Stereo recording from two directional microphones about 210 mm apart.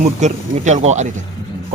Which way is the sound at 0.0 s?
35° right (ahead or behind).